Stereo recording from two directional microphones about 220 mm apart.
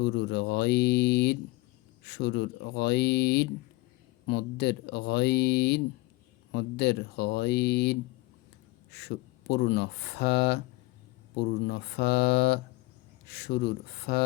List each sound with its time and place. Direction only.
0.0 s speech: 50° left (ahead or behind)